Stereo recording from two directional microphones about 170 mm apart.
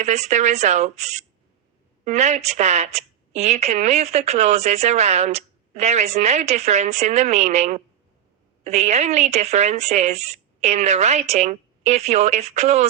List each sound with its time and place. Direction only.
0.0 s a woman's voice: 40° right (ahead or behind)